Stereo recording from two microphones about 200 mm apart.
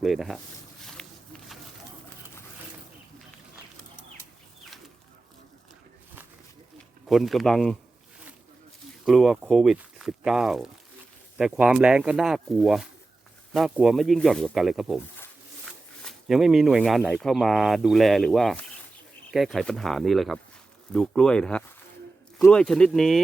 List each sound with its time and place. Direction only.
0.0 s speech: centre (ahead or behind)
0.9 s a sound: centre (ahead or behind)
7.1 s speech: centre (ahead or behind)
9.0 s speech: centre (ahead or behind)
16.0 s speech: centre (ahead or behind)